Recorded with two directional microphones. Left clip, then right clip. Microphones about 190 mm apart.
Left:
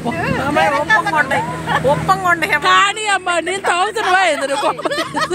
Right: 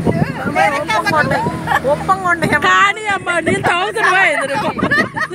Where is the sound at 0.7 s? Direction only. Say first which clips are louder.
Left 2 dB; 50° right (ahead or behind).